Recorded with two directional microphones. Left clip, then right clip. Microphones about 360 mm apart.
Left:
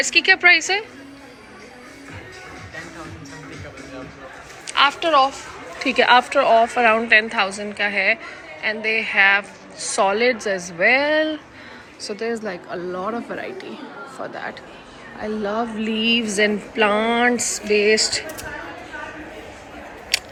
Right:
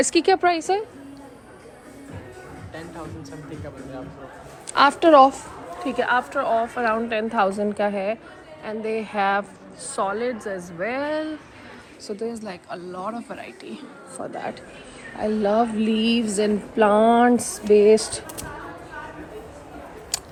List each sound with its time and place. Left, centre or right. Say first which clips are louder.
0.0 s speech: left 4 dB; centre
4.7 s a woman's voice: right 2 dB; centre
5.8 s a woman's voice: left 7 dB; centre
15.2 s speech: right 3 dB; centre